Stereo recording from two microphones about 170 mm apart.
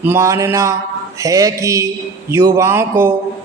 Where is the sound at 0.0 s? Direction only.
15° right (ahead or behind).